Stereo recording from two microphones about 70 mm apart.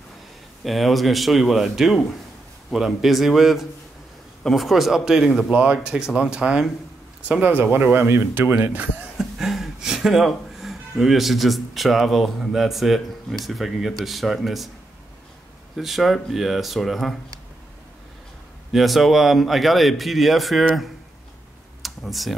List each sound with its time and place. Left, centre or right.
0.7 s a man's voice: centre
5.5 s speech: centre
7.2 s speech: right
9.2 s a man's voice: centre
15.7 s a man's voice: centre
18.7 s a man's voice: centre
21.8 s computer keyboard: centre